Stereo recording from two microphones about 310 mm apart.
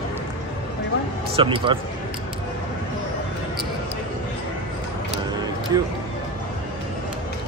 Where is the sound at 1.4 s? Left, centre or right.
Centre.